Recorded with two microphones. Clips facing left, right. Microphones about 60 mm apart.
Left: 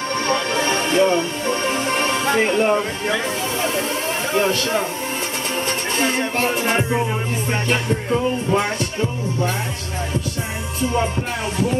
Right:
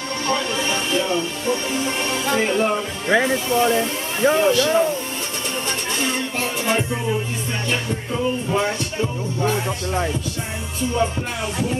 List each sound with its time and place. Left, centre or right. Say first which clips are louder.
0.3 s music: left 1 dB; left
2.3 s speech: left 1 dB; left
5.9 s music: left 5 dB; left